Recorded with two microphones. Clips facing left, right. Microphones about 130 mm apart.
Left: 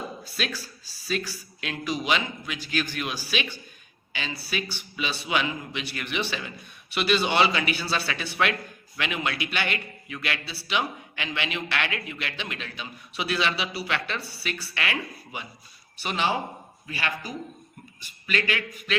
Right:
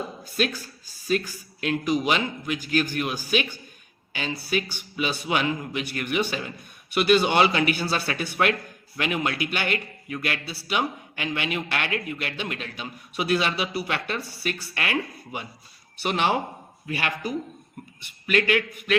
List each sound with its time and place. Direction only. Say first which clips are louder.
0.9 s a man's voice: right 5 dB; 45° right (ahead or behind)